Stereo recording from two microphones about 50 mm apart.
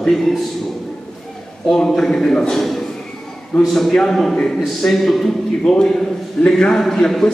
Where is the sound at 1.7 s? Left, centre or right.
Centre.